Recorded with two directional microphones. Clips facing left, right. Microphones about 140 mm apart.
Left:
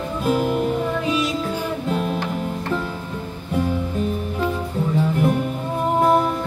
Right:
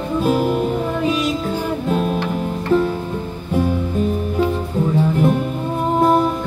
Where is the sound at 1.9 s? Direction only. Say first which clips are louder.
Right 4 dB; 40° right (ahead or behind).